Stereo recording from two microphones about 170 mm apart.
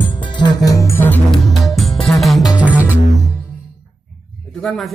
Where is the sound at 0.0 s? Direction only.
30° left (ahead or behind); by 1.4 s 10° left (ahead or behind).